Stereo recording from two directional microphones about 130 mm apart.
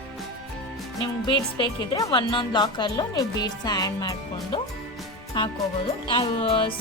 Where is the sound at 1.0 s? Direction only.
35° left (ahead or behind).